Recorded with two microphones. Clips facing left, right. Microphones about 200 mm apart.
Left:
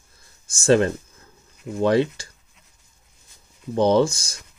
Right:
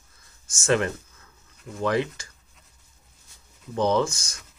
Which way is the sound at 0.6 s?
30° left (ahead or behind).